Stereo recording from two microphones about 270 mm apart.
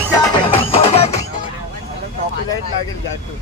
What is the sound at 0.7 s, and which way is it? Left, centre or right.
Music, left.